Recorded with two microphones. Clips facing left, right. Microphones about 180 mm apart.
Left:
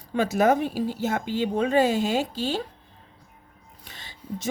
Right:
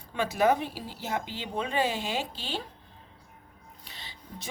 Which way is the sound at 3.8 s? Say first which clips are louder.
Left 9 dB; 45° left (ahead or behind).